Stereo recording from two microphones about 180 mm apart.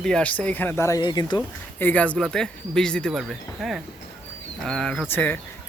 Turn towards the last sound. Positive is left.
turn(degrees=10)  # may be behind; listen again after turning